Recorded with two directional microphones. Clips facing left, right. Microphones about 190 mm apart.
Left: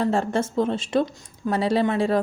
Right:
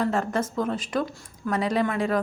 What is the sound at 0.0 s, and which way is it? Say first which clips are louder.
A woman's voice: left 3 dB; 30° left (ahead or behind).